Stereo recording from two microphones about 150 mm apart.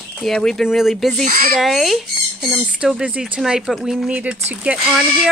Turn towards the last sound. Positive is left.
turn(degrees=-5)  # may be behind; listen again after turning